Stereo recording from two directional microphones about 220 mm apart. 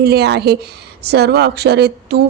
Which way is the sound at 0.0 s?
50° right (ahead or behind).